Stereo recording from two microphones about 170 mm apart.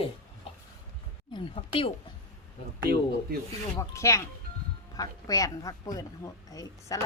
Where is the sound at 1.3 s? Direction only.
30° left (ahead or behind).